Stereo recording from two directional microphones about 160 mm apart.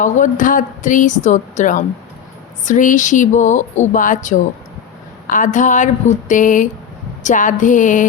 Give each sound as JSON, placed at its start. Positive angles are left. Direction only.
{"t": 0.0, "sound": "a woman's voice", "side_deg": 55}